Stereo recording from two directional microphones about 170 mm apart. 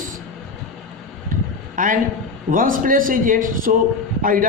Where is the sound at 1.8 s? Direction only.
55° right (ahead or behind).